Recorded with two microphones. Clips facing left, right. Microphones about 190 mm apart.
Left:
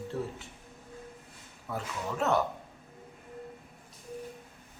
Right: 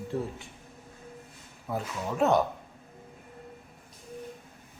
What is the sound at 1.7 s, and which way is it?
Speech, 15° right (ahead or behind).